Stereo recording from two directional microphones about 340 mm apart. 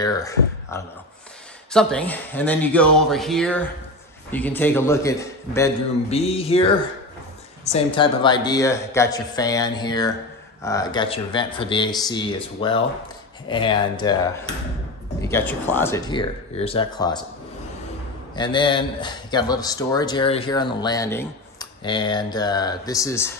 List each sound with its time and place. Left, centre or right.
0.0 s a man's voice: centre
7.7 s a man's voice: centre
18.3 s a man's voice: centre